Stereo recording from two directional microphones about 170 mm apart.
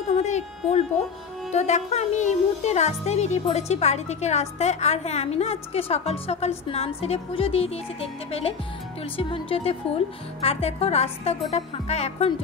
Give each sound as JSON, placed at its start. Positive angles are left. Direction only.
{"t": 0.2, "sound": "music", "side_deg": 40}
{"t": 1.5, "sound": "speech", "side_deg": 40}